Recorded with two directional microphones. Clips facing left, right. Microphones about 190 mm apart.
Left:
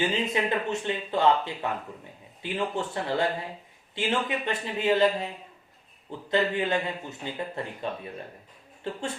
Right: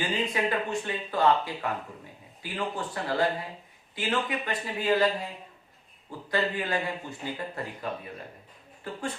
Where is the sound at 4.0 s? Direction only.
25° left (ahead or behind).